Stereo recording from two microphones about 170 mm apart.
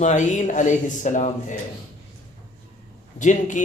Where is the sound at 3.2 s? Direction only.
45° left (ahead or behind).